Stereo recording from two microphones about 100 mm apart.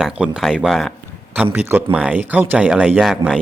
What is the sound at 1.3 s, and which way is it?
A man's voice, 15° right (ahead or behind).